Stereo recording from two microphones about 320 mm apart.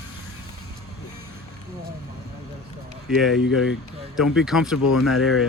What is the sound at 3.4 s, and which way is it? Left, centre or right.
Speech, left.